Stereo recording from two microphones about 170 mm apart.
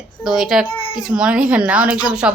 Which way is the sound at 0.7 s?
35° left (ahead or behind).